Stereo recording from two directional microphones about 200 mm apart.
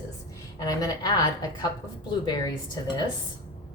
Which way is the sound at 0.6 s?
20° left (ahead or behind).